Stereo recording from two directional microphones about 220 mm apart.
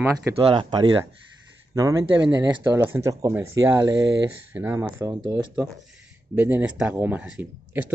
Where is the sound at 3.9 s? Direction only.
55° right (ahead or behind).